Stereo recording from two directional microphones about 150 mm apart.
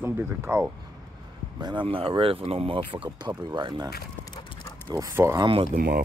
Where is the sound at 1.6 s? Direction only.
30° right (ahead or behind).